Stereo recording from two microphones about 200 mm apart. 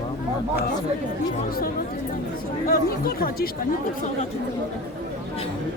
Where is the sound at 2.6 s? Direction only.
50° left (ahead or behind).